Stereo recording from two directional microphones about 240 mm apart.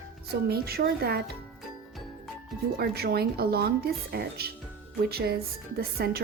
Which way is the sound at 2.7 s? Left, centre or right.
Right.